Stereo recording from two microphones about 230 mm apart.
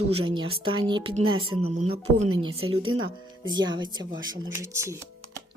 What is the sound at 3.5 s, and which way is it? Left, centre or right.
Speech, centre.